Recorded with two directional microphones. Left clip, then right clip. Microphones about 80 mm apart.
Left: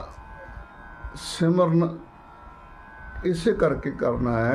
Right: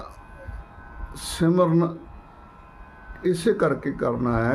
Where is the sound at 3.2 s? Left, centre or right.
Right.